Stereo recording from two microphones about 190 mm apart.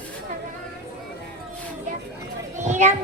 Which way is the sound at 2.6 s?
40° right (ahead or behind).